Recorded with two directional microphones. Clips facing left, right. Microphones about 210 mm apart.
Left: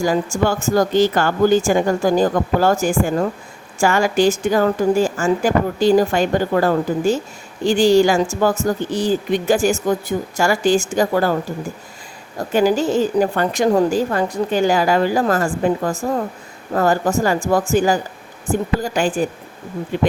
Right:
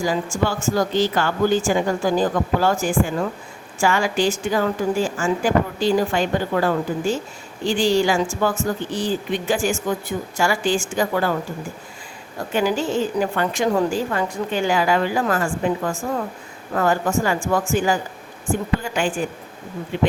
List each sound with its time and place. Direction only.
0.0 s a woman's voice: 45° left (ahead or behind)
12.4 s a woman's voice: 40° left (ahead or behind)